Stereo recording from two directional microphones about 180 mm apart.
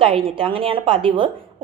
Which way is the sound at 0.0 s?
30° right (ahead or behind).